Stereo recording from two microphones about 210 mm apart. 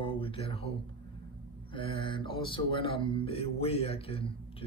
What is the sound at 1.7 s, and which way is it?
Speech, 25° left (ahead or behind).